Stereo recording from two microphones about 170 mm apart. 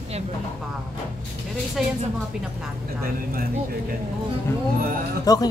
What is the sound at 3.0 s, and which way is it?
Speech, 60° right (ahead or behind).